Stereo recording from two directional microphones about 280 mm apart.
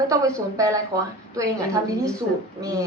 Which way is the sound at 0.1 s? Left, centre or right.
Centre.